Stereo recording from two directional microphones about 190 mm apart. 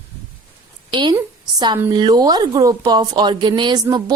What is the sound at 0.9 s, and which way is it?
A woman's voice, 25° right (ahead or behind).